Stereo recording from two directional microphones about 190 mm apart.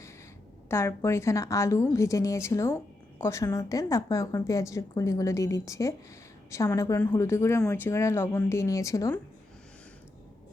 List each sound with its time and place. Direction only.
0.7 s a woman's voice: 15° left (ahead or behind)